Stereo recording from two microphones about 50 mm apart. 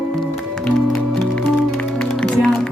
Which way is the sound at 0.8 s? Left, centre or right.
Centre.